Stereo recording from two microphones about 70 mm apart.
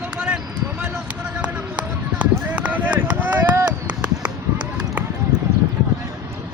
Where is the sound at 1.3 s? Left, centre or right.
Centre.